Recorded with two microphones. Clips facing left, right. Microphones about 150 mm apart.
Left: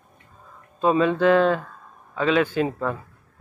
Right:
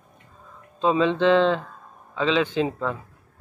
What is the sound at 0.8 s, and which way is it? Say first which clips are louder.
Speech: left 1 dB; 20° right (ahead or behind).